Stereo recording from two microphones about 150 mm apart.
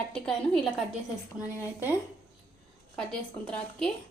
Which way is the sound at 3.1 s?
5° left (ahead or behind).